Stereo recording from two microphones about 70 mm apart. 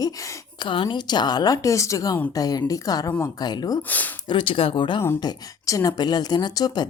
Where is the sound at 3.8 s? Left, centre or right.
Left.